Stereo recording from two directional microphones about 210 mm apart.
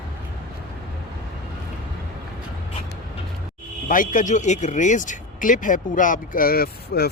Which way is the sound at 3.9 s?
40° left (ahead or behind).